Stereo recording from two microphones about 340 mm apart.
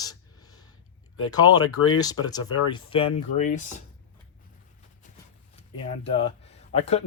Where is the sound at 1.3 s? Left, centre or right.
Centre.